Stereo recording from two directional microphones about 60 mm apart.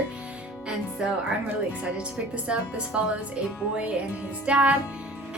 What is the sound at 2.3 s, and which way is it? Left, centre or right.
Speech, centre.